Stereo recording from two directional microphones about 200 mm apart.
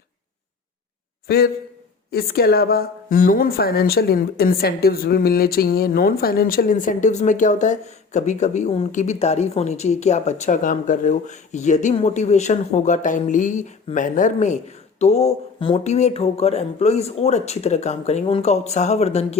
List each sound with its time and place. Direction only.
1.3 s a man's voice: 50° left (ahead or behind); by 19.4 s 30° left (ahead or behind)